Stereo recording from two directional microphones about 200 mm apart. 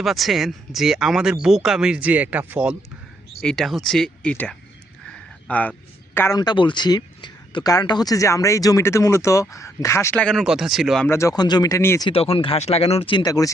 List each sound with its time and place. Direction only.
0.0 s speech: centre (ahead or behind)
3.4 s speech: centre (ahead or behind)
5.0 s a sound: 5° left (ahead or behind)
6.1 s speech: 15° left (ahead or behind); by 11.1 s centre (ahead or behind)
11.1 s speech: 15° left (ahead or behind)
12.0 s speech: 30° left (ahead or behind)